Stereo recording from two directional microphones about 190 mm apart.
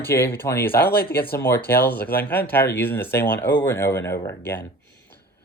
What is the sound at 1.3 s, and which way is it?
Speech, 10° left (ahead or behind).